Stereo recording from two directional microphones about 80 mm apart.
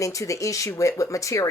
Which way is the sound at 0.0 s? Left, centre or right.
Left.